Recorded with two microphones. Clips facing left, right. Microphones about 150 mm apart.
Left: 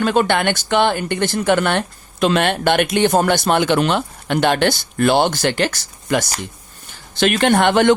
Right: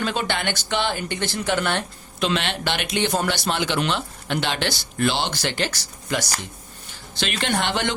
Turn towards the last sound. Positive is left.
turn(degrees=55)  # may be behind; listen again after turning